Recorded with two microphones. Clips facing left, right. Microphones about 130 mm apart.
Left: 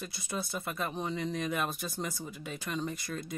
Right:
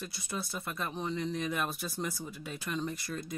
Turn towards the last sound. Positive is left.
turn(degrees=0)  # may be behind; listen again after turning